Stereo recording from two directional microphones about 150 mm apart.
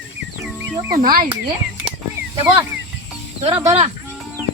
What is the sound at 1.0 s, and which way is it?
Speech, 75° right (ahead or behind).